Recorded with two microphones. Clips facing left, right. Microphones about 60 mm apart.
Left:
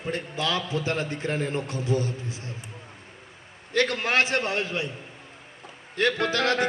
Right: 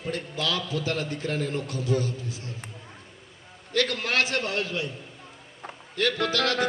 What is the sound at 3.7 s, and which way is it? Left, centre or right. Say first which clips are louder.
Speech: left 2 dB; left.